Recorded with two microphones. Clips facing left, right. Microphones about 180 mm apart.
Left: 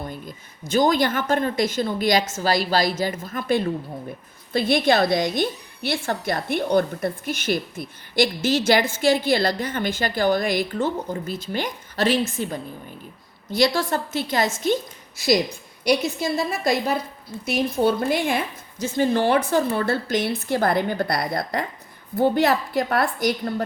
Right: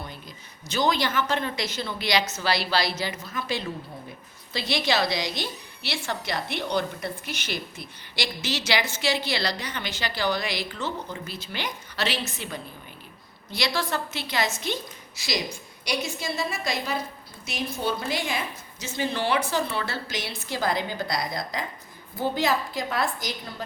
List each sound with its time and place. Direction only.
0.0 s a woman's voice: 50° left (ahead or behind)